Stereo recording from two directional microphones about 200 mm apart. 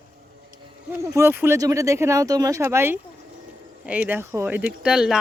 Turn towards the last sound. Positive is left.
turn(degrees=-5)  # may be behind; listen again after turning